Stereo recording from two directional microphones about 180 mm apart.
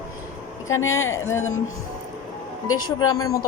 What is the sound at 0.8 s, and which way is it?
Speech, 90° left.